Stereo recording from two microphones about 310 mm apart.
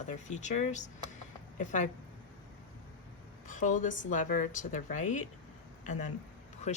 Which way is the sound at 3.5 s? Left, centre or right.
Left.